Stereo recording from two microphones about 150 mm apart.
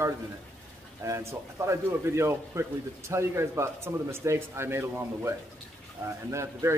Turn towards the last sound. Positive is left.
turn(degrees=-20)  # may be behind; listen again after turning